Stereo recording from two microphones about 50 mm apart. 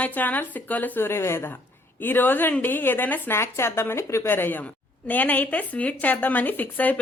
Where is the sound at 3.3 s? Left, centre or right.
Left.